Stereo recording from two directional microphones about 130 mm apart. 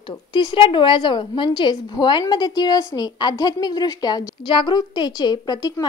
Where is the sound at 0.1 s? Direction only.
35° left (ahead or behind).